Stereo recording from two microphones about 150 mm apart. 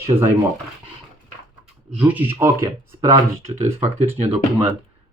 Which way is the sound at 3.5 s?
45° right (ahead or behind).